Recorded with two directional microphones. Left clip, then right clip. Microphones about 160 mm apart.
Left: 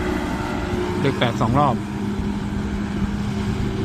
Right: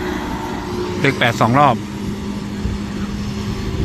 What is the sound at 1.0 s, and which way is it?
Speech, 25° right (ahead or behind).